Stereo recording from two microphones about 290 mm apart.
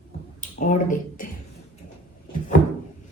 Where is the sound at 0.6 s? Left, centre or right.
Left.